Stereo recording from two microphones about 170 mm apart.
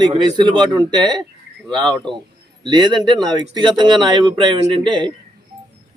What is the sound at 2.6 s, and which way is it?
Speech, 25° right (ahead or behind).